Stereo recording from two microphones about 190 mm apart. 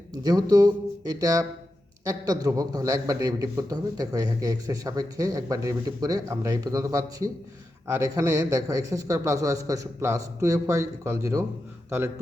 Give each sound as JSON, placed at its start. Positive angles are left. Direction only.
{"t": 0.2, "sound": "a man's voice", "side_deg": -20}